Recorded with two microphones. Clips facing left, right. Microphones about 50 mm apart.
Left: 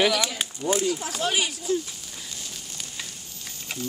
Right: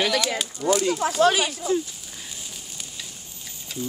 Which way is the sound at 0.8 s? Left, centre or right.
Right.